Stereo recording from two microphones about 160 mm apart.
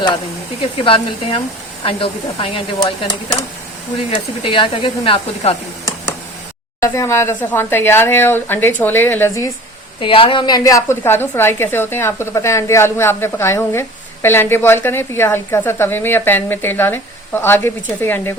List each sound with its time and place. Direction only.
0.8 s speech: 35° left (ahead or behind)
4.1 s speech: 30° left (ahead or behind)
6.8 s a woman's voice: 20° left (ahead or behind)
10.0 s a woman's voice: 35° left (ahead or behind); by 18.3 s 15° left (ahead or behind)